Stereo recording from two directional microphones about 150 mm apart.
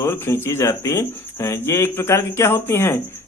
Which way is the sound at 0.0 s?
20° left (ahead or behind).